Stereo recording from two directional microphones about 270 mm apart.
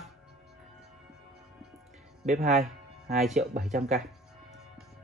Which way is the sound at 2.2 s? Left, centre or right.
Right.